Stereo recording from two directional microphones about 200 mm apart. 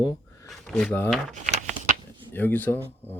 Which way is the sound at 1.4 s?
35° right (ahead or behind).